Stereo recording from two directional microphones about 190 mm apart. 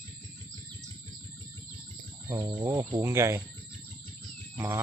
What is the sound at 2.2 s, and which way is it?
Speech, 20° right (ahead or behind).